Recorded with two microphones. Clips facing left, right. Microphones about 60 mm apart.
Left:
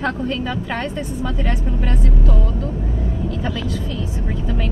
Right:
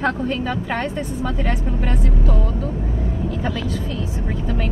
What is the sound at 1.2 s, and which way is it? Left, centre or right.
Speech, right.